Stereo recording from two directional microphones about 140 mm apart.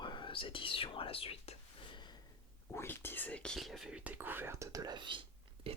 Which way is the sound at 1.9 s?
30° left (ahead or behind).